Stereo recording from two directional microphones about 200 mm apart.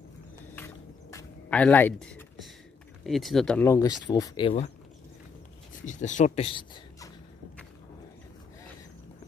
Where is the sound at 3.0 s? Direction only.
Centre (ahead or behind); by 4.5 s 20° left (ahead or behind).